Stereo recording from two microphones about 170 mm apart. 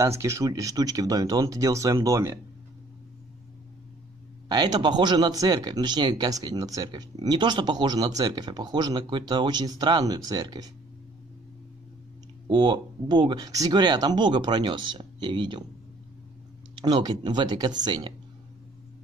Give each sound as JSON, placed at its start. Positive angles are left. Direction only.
{"t": 0.0, "sound": "speech", "side_deg": -15}
{"t": 4.5, "sound": "speech", "side_deg": -25}
{"t": 12.4, "sound": "speech", "side_deg": -30}
{"t": 16.8, "sound": "speech", "side_deg": -25}